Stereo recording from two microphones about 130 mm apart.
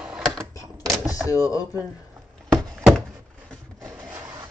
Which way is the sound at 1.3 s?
25° left (ahead or behind).